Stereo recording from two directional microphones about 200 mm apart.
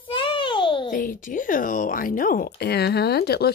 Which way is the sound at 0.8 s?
45° left (ahead or behind).